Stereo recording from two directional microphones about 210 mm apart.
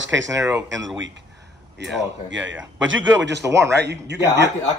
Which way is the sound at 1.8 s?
55° right (ahead or behind).